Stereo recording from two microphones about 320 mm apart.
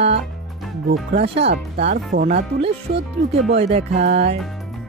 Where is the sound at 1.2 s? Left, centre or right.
Centre.